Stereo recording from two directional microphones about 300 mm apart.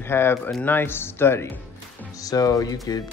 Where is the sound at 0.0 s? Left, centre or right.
Centre.